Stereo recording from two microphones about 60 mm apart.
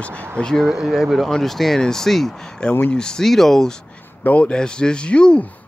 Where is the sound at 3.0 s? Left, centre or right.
Centre.